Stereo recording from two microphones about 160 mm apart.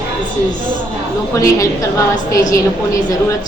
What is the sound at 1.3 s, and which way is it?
A woman's voice, 20° left (ahead or behind).